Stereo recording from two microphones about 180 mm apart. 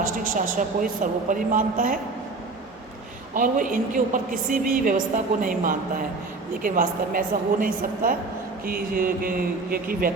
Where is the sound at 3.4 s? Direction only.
50° right (ahead or behind).